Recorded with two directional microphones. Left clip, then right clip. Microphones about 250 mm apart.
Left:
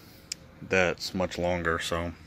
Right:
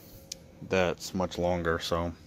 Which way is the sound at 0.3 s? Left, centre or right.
Centre.